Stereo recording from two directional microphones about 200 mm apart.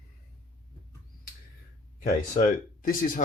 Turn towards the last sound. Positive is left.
turn(degrees=45)  # may be behind; listen again after turning